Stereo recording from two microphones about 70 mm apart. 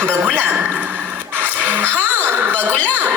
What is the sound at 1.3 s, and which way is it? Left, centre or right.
Music, right.